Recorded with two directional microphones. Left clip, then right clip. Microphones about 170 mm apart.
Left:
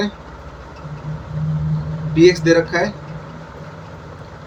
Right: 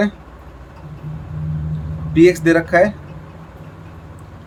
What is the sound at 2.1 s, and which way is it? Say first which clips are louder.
Speech: even; 55° right (ahead or behind).